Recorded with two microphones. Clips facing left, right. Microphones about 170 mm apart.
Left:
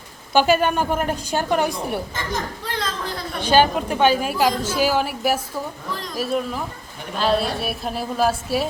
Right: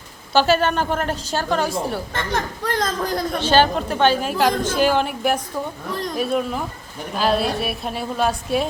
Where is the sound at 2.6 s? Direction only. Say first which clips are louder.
Right 5 dB; 45° right (ahead or behind).